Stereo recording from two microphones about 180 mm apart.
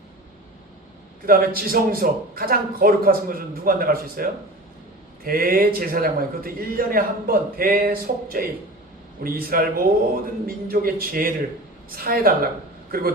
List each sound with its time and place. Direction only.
1.2 s a man's voice: 55° right (ahead or behind)